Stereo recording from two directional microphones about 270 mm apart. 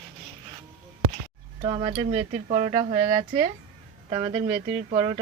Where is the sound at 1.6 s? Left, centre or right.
Centre.